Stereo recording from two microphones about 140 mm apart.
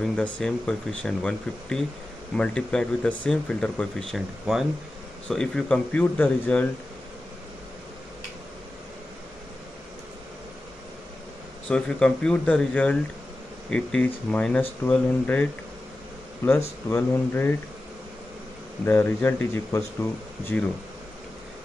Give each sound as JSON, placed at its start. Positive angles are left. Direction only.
{"t": 0.0, "sound": "speech", "side_deg": 5}
{"t": 11.7, "sound": "speech", "side_deg": 5}
{"t": 16.4, "sound": "speech", "side_deg": 20}
{"t": 18.9, "sound": "speech", "side_deg": 10}